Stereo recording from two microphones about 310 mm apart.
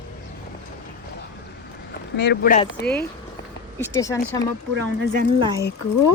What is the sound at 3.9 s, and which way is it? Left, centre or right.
Speech, centre.